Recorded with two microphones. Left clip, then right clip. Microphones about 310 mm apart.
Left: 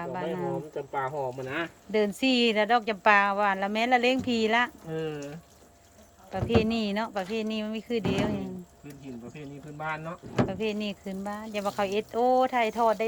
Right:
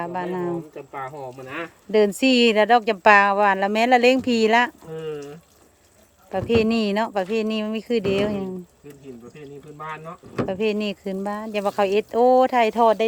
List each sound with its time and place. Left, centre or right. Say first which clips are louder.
0.0 s speech: right 5 dB; centre
0.8 s speech: left 2 dB; centre
2.0 s speech: right 8 dB; centre
6.3 s speech: right 6 dB; centre
10.4 s speech: right 8 dB; centre